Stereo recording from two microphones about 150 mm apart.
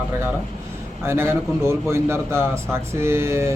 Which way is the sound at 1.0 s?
15° right (ahead or behind).